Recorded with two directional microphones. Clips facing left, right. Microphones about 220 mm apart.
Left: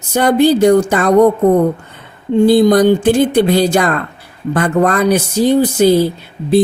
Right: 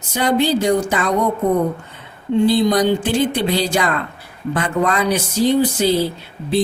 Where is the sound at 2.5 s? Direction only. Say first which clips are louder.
Left 8 dB; 50° left (ahead or behind).